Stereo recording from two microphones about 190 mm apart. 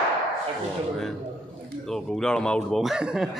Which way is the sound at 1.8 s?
Centre (ahead or behind).